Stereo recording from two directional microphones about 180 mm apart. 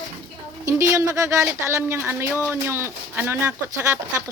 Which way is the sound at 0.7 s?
15° right (ahead or behind).